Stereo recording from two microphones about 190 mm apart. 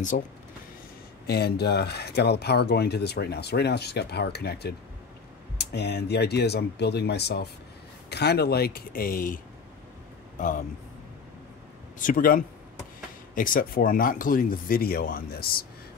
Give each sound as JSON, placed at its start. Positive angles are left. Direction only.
{"t": 0.1, "sound": "speech", "side_deg": 45}
{"t": 1.2, "sound": "speech", "side_deg": 60}
{"t": 12.0, "sound": "speech", "side_deg": 45}